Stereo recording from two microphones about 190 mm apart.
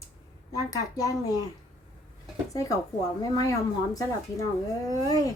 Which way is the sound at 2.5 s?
15° left (ahead or behind).